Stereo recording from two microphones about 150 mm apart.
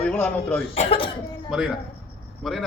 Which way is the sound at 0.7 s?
40° left (ahead or behind).